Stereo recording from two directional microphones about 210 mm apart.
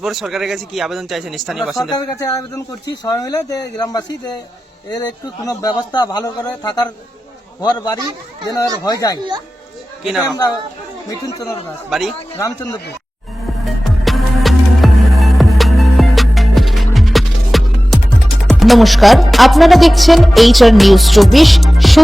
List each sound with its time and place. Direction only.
0.0 s music: centre (ahead or behind)
2.0 s a man's voice: 15° left (ahead or behind)
9.1 s speech: 20° right (ahead or behind)
10.0 s music: centre (ahead or behind)
11.1 s a man's voice: 15° left (ahead or behind)
11.9 s music: centre (ahead or behind)
12.4 s a man's voice: 15° left (ahead or behind)
13.8 s music: centre (ahead or behind)